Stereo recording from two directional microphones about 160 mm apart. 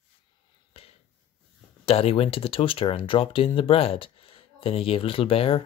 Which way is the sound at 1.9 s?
40° left (ahead or behind).